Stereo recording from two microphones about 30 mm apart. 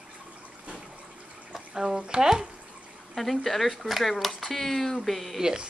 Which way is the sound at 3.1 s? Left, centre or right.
Centre.